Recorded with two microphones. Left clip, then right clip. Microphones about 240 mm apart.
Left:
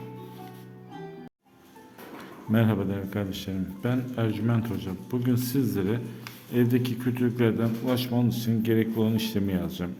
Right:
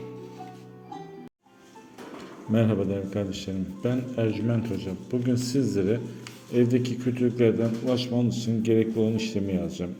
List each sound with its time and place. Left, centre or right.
2.5 s speech: centre